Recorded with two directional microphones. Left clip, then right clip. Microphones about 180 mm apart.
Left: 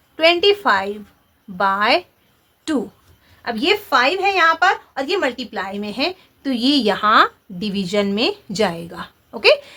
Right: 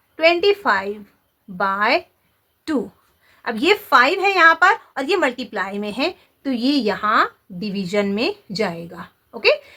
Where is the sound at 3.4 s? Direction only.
30° right (ahead or behind).